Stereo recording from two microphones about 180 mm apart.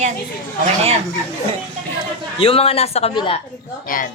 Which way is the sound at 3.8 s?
50° left (ahead or behind).